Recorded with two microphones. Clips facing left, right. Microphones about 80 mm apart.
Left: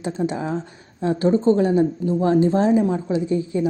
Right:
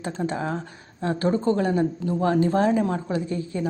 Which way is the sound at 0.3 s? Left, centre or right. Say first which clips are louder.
Left 2 dB; right.